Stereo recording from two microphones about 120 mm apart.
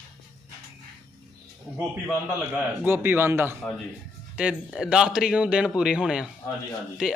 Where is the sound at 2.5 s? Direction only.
15° right (ahead or behind).